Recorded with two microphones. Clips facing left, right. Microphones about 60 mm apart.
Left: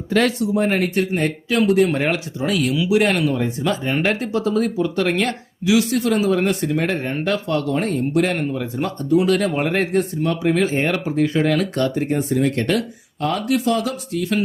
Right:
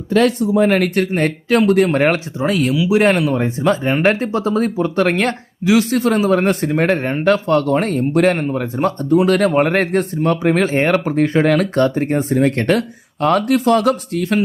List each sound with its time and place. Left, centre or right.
1.1 s speech: right
2.4 s speech: right